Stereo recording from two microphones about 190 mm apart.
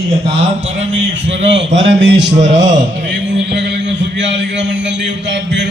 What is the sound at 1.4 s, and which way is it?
Speech, 70° right (ahead or behind).